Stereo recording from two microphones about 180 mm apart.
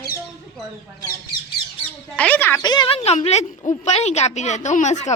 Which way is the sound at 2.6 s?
25° left (ahead or behind).